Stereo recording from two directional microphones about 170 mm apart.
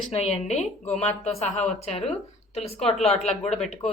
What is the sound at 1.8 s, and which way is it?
A woman's voice, 40° left (ahead or behind).